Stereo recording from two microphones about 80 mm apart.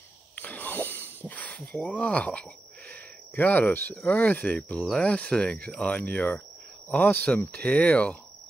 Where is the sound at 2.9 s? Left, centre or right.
Left.